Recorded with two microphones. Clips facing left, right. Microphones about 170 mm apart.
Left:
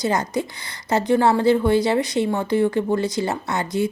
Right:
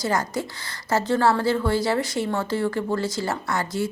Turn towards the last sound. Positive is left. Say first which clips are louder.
# left 3 dB
turn(degrees=20)  # may be behind; listen again after turning